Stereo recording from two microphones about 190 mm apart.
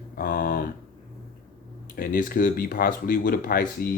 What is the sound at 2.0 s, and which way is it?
Speech, 50° left (ahead or behind).